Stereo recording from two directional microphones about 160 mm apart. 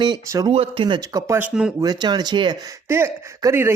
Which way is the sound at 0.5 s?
35° right (ahead or behind).